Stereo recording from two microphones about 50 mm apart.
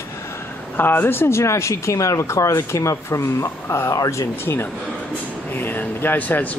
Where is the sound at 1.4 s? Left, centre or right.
Left.